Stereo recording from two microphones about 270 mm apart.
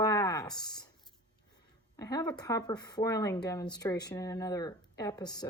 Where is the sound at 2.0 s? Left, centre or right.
Centre.